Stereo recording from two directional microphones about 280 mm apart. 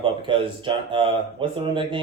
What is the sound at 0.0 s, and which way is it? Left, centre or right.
Speech, centre.